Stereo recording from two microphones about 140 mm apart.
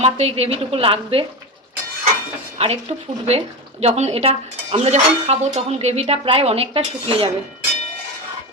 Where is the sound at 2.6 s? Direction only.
45° right (ahead or behind).